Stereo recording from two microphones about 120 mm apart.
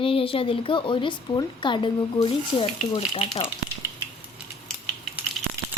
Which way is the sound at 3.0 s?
55° left (ahead or behind).